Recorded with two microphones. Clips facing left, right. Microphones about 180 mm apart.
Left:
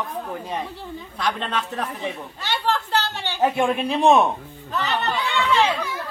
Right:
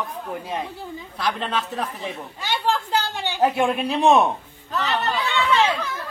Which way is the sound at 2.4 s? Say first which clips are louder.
Right 1 dB; 10° right (ahead or behind).